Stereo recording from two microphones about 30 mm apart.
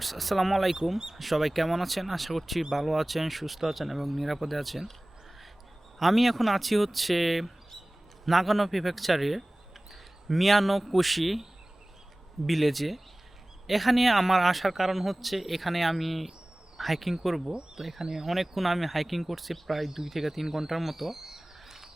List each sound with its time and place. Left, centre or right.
0.0 s speech: centre
6.0 s speech: centre
12.5 s speech: centre
18.0 s speech: centre
18.3 s speech: centre
20.7 s bird: centre